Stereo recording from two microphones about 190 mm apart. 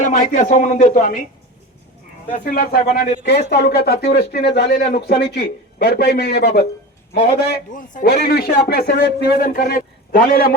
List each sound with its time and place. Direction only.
0.0 s speech: 40° left (ahead or behind)
2.3 s a man's voice: 45° left (ahead or behind)